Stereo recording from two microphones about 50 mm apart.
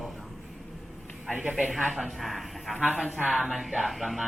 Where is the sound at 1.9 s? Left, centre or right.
Centre.